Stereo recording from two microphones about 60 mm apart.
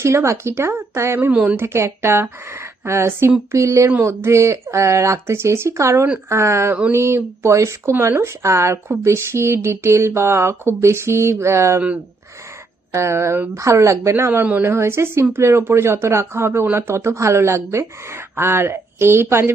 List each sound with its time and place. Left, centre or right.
0.0 s speech: right
1.3 s speech: right
1.5 s speech: right
3.5 s speech: right
12.9 s speech: right